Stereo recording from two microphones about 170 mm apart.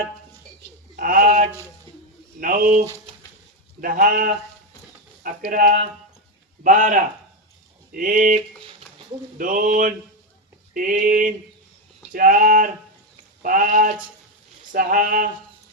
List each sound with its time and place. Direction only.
0.9 s a sound: 55° right (ahead or behind)
2.4 s a man's voice: 50° right (ahead or behind)
9.4 s speech: 50° right (ahead or behind)